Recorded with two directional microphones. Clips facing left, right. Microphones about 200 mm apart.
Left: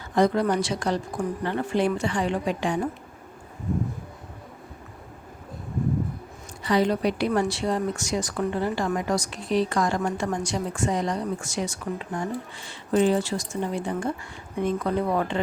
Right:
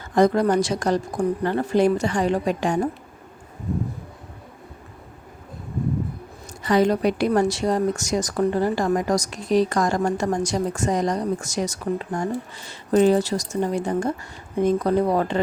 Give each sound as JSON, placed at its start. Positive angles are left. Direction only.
{"t": 0.2, "sound": "a woman's voice", "side_deg": -45}
{"t": 6.6, "sound": "speech", "side_deg": -45}